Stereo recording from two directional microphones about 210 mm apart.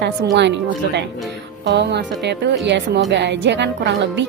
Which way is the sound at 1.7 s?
55° right (ahead or behind).